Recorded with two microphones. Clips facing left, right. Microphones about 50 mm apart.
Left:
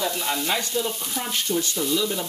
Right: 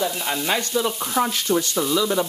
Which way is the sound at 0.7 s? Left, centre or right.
Right.